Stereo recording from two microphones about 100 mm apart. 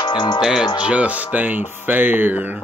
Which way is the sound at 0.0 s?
45° left (ahead or behind).